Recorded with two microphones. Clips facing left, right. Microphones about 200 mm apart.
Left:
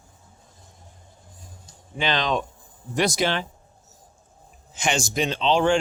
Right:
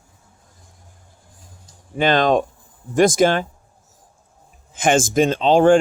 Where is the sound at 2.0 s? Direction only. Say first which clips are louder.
Right 8 dB; 50° right (ahead or behind).